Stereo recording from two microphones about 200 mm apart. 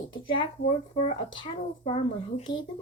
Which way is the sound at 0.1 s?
25° left (ahead or behind).